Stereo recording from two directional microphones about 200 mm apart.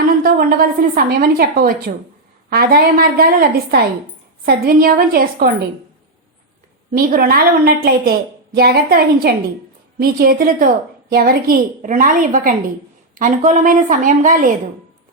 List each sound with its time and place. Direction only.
0.2 s a woman's voice: 45° right (ahead or behind)
6.9 s a woman's voice: 45° right (ahead or behind)